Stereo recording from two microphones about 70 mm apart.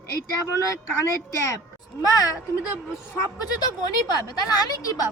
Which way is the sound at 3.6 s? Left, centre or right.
Left.